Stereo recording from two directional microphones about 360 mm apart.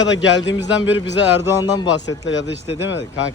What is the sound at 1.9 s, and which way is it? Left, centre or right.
Speech, left.